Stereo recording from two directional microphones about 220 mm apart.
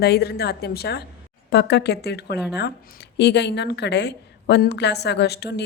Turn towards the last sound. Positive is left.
turn(degrees=50)  # may be behind; listen again after turning